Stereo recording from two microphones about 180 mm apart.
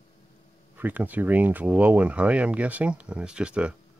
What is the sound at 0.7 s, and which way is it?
Speech, 10° right (ahead or behind).